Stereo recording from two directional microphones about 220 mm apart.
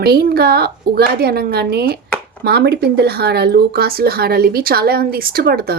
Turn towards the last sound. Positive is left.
turn(degrees=-45)  # may be behind; listen again after turning